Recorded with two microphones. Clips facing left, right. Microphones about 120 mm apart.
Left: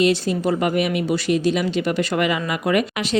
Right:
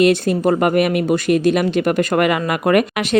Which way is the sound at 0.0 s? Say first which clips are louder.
Right 4 dB; 55° right (ahead or behind).